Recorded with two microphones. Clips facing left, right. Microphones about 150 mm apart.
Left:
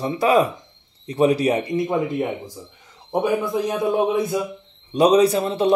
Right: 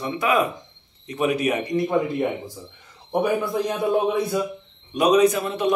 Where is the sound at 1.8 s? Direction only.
15° left (ahead or behind).